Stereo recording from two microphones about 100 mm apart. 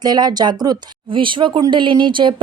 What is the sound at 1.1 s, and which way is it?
Speech, 55° right (ahead or behind).